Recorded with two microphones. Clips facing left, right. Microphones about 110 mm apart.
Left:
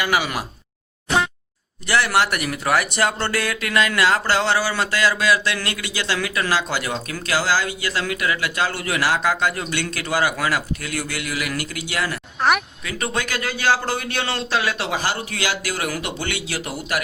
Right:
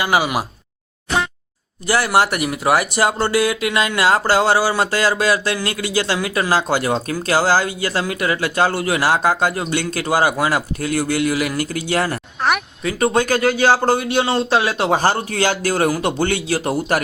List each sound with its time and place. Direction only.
0.0 s speech: 25° right (ahead or behind)
2.1 s speech: 35° right (ahead or behind)
2.4 s speech: 20° right (ahead or behind)
3.3 s speech: 20° right (ahead or behind); by 12.2 s 40° right (ahead or behind)
12.4 s a sound: centre (ahead or behind)
12.8 s speech: 30° right (ahead or behind)
13.9 s speech: 20° right (ahead or behind)
14.9 s speech: 45° right (ahead or behind)